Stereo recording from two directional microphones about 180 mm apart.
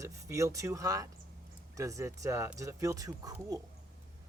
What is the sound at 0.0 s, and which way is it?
Speech, 15° right (ahead or behind).